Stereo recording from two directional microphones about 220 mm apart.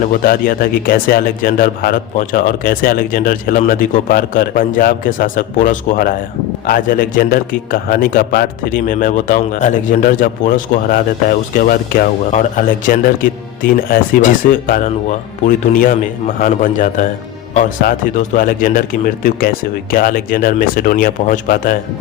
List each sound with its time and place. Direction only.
0.0 s speech: 40° left (ahead or behind)
13.6 s speech: 40° left (ahead or behind)